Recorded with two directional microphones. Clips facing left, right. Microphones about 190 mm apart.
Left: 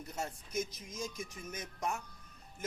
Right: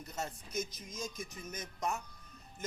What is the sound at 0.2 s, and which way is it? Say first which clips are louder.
Speech: left 1 dB; 10° left (ahead or behind).